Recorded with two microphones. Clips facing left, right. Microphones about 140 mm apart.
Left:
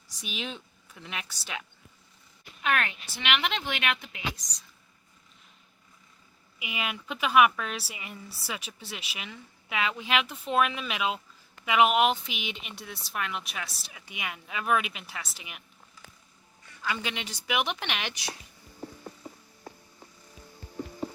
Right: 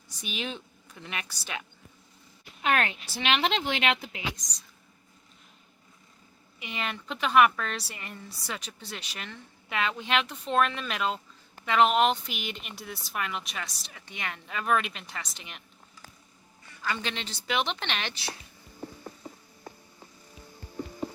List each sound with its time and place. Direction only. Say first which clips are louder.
0.2 s a woman's voice: right 2 dB; centre (ahead or behind)
2.6 s speech: right 2 dB; 30° right (ahead or behind)
6.6 s a woman's voice: even; 5° left (ahead or behind)
16.8 s speech: even; 10° left (ahead or behind)